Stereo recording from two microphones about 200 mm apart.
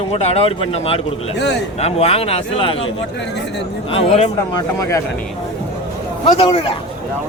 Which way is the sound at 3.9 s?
30° left (ahead or behind).